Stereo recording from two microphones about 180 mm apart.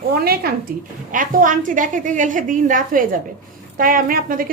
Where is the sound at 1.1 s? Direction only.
50° right (ahead or behind).